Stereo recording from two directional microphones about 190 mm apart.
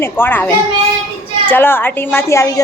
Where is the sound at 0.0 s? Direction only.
10° left (ahead or behind).